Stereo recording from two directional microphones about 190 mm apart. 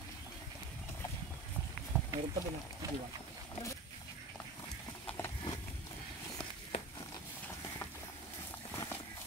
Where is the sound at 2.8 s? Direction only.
20° right (ahead or behind).